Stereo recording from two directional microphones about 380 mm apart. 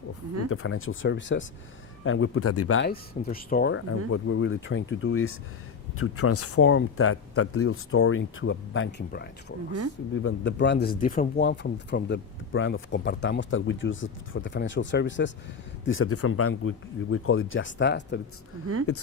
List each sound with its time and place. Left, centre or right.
0.5 s speech: left
3.2 s speech: left